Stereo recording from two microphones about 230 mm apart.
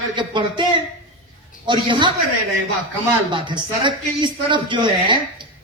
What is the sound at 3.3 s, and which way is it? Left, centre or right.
Speech, right.